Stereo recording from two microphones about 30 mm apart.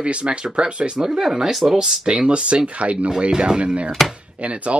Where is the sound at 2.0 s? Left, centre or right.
Right.